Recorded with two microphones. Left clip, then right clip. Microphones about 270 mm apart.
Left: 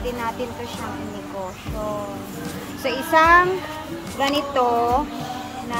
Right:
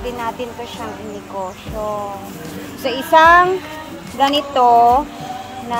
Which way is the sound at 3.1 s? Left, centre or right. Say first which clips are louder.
Right 5 dB; right.